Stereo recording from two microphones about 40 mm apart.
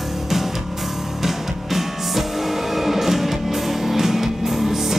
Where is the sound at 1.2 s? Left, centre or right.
Centre.